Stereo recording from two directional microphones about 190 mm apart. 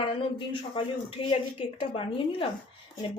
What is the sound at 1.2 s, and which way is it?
Speech, 30° left (ahead or behind).